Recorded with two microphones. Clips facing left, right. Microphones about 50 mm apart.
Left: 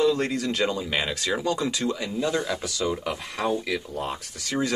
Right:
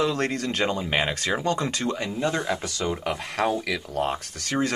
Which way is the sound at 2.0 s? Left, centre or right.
Right.